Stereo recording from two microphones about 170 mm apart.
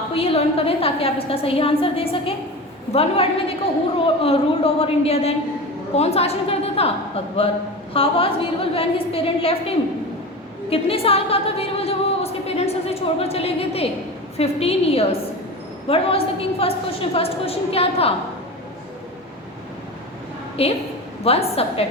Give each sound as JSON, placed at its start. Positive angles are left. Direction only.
{"t": 0.1, "sound": "a woman's voice", "side_deg": 35}
{"t": 7.9, "sound": "a woman's voice", "side_deg": 35}
{"t": 10.7, "sound": "a sound", "side_deg": 35}
{"t": 14.3, "sound": "a woman's voice", "side_deg": 35}
{"t": 20.6, "sound": "a woman's voice", "side_deg": 35}